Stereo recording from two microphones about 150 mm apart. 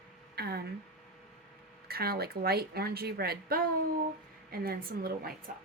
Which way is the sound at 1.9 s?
90° right.